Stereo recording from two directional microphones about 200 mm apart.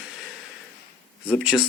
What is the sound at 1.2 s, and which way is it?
Speech, 5° right (ahead or behind).